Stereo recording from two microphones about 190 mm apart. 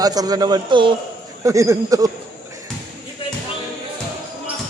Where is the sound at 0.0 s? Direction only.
20° right (ahead or behind).